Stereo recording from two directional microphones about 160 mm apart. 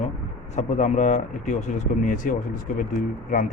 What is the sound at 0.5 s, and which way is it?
Speech, 50° left (ahead or behind).